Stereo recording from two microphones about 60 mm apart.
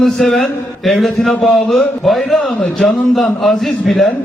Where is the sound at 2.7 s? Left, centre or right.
Centre.